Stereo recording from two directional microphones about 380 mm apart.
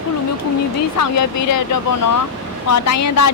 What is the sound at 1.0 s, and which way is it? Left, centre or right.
Speech, left.